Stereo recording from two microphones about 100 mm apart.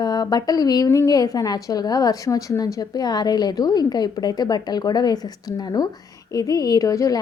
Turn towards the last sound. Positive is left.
turn(degrees=35)  # may be behind; listen again after turning